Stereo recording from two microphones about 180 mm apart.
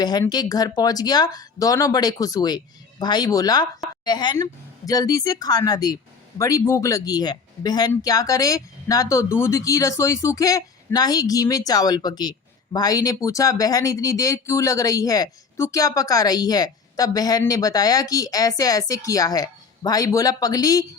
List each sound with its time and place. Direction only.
0.0 s speech: 20° left (ahead or behind)